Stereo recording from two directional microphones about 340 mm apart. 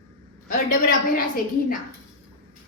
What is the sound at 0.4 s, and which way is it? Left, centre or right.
Speech, left.